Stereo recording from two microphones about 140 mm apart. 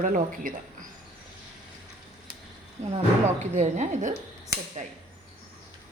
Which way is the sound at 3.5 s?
55° right (ahead or behind).